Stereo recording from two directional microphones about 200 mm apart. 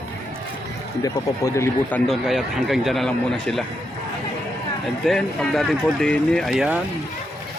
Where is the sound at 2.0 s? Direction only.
Centre (ahead or behind).